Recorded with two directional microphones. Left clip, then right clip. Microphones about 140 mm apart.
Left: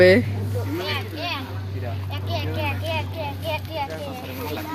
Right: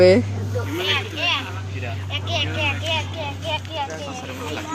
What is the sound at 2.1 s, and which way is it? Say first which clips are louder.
Vehicle: right 6 dB; 10° left (ahead or behind).